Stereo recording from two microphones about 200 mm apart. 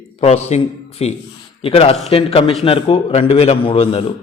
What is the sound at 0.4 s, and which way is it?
A man's voice, 30° left (ahead or behind).